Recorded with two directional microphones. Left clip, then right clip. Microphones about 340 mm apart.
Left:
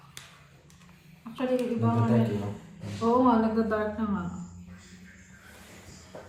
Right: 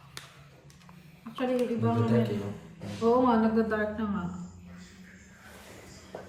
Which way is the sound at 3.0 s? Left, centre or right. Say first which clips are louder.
Left 1 dB; centre.